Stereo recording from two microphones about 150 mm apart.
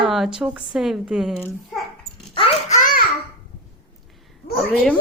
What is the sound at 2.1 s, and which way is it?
Dog, 35° left (ahead or behind).